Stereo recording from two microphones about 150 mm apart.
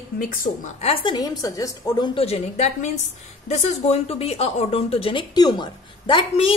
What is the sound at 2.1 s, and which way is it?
A woman's voice, 45° left (ahead or behind).